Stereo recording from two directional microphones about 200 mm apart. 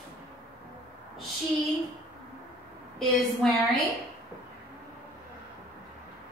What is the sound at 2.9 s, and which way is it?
Speech, centre (ahead or behind).